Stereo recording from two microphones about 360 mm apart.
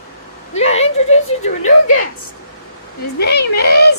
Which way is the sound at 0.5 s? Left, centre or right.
Centre.